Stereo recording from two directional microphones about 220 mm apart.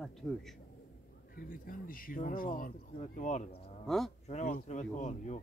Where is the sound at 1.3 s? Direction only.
40° left (ahead or behind).